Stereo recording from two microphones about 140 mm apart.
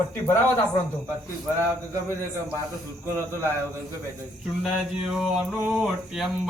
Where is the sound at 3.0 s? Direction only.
20° right (ahead or behind).